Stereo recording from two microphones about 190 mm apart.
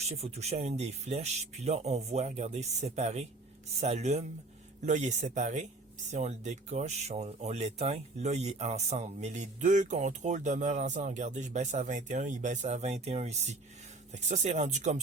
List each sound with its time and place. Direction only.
0.2 s speech: 35° right (ahead or behind)